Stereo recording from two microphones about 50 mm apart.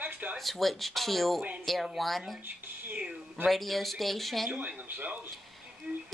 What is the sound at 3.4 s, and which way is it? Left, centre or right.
Speech, centre.